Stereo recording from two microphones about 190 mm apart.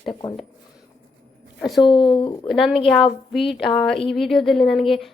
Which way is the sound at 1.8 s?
25° left (ahead or behind).